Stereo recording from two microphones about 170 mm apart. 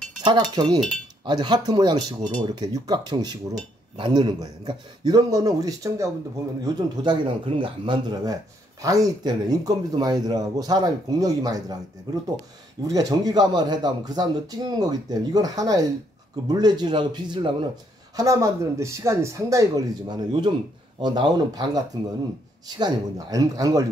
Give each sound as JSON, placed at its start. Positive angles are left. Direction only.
{"t": 0.2, "sound": "speech", "side_deg": -25}